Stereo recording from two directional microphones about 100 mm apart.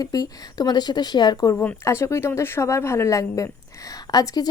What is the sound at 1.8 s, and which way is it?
A woman's voice, 30° left (ahead or behind).